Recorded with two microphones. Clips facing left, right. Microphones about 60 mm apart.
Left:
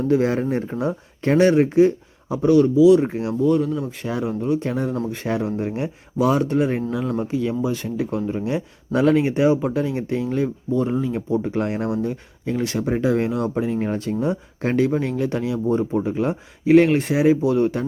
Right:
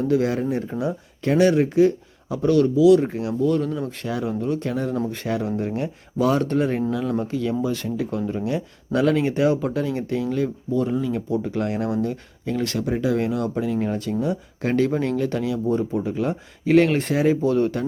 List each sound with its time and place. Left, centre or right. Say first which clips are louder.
0.0 s speech: left 2 dB; left
3.8 s speech: left 1 dB; centre
4.0 s speech: left 1 dB; left
14.8 s speech: left 1 dB; centre
15.1 s speech: even; centre